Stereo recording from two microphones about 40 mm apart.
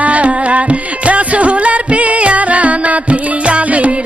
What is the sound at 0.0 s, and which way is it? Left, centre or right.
Music, right.